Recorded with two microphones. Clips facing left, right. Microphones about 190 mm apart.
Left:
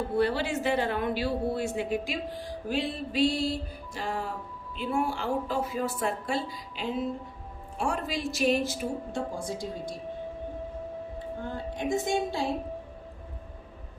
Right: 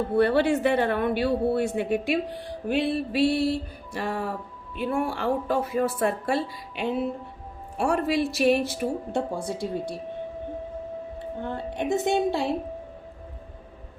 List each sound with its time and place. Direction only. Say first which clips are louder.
0.2 s speech: right 7 dB; 60° right (ahead or behind)
11.4 s speech: right 4 dB; 65° right (ahead or behind)